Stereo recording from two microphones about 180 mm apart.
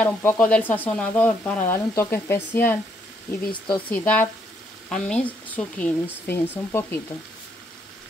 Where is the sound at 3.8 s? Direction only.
5° left (ahead or behind).